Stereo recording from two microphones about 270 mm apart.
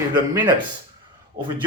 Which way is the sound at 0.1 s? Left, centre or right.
Centre.